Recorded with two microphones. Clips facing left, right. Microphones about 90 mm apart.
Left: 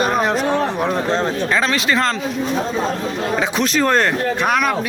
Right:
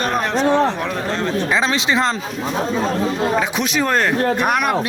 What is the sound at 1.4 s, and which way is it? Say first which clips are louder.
Speech: even; 20° right (ahead or behind).